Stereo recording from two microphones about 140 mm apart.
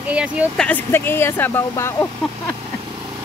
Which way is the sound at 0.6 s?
10° left (ahead or behind).